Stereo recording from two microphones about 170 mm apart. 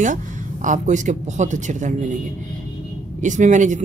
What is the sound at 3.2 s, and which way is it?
Speech, 45° right (ahead or behind).